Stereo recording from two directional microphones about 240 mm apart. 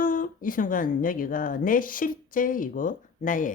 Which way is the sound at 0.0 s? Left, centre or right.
Left.